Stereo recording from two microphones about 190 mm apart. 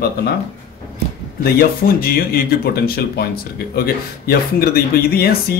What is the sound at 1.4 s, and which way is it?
Speech, 55° left (ahead or behind).